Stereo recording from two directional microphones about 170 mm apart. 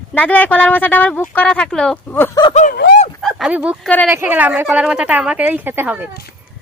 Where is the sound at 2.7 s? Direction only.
70° left (ahead or behind).